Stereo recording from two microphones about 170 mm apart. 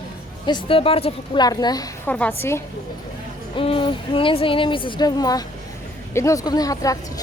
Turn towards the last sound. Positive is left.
turn(degrees=20)  # may be behind; listen again after turning